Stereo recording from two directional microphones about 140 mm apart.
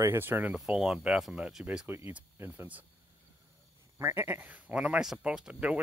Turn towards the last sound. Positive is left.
turn(degrees=-5)  # may be behind; listen again after turning